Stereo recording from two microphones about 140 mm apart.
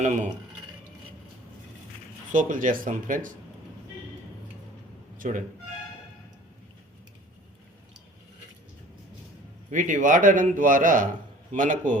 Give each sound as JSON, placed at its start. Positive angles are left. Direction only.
{"t": 0.0, "sound": "speech", "side_deg": -60}
{"t": 2.3, "sound": "a man's voice", "side_deg": -70}
{"t": 5.1, "sound": "music", "side_deg": -75}
{"t": 9.7, "sound": "a man's voice", "side_deg": -65}